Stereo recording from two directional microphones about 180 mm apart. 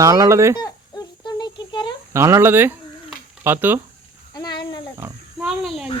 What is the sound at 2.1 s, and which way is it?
Speech, 15° right (ahead or behind).